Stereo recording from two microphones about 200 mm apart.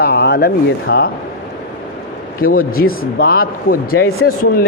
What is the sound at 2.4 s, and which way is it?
Speech, 45° left (ahead or behind).